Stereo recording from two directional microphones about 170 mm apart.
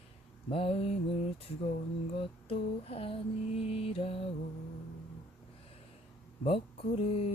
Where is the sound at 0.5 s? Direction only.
35° left (ahead or behind).